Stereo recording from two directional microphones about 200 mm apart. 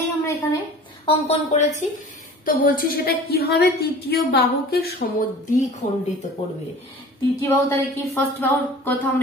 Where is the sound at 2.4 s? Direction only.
45° left (ahead or behind).